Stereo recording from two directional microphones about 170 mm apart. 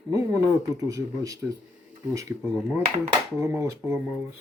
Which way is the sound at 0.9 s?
20° right (ahead or behind).